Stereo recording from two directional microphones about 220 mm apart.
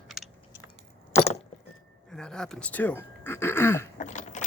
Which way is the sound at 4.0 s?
35° left (ahead or behind).